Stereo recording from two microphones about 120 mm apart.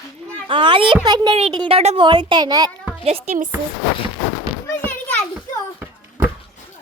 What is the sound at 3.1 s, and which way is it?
Speech, 80° right.